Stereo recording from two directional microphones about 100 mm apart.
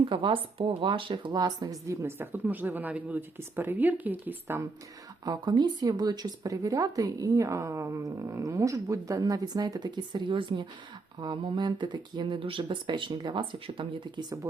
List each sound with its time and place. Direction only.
0.0 s speech: 60° right (ahead or behind); by 4.6 s 20° right (ahead or behind)
5.2 s speech: 45° right (ahead or behind)